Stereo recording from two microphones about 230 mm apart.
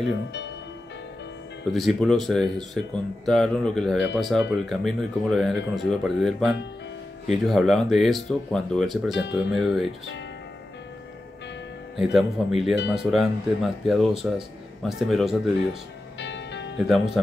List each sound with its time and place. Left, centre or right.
1.7 s speech: centre
12.0 s speech: centre
16.2 s music: left
16.8 s speech: centre